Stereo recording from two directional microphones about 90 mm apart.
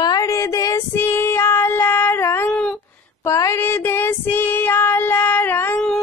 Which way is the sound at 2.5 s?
10° left (ahead or behind).